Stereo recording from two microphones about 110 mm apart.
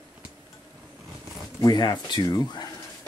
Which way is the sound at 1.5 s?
35° left (ahead or behind).